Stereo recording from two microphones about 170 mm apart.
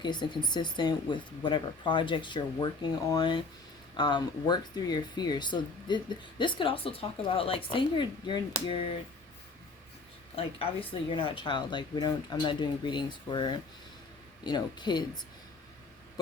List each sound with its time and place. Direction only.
0.0 s speech: 25° left (ahead or behind)
10.3 s speech: 35° left (ahead or behind)